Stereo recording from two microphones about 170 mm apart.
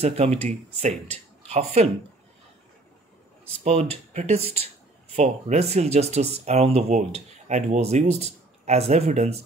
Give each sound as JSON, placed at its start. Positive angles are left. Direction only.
{"t": 0.0, "sound": "speech", "side_deg": -35}
{"t": 3.6, "sound": "speech", "side_deg": -40}